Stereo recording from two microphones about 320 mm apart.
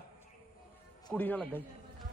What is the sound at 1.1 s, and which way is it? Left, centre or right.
Speech, centre.